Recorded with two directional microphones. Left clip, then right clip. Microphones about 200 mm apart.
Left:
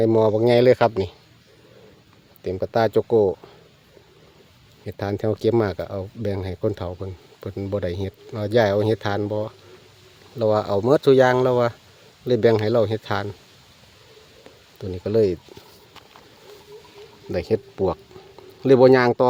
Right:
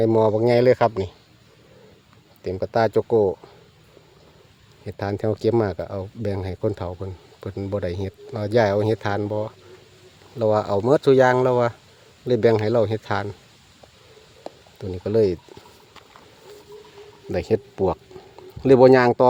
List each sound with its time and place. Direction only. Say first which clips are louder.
0.0 s speech: even; centre (ahead or behind)
2.4 s speech: even; centre (ahead or behind)
4.9 s speech: even; centre (ahead or behind)
14.8 s speech: even; centre (ahead or behind)
17.2 s speech: right 1 dB; 10° right (ahead or behind)